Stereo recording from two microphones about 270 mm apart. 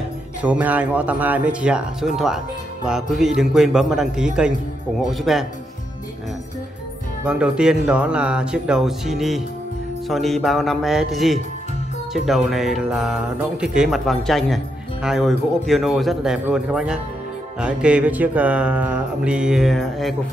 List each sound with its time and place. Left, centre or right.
0.4 s speech: centre
7.2 s speech: centre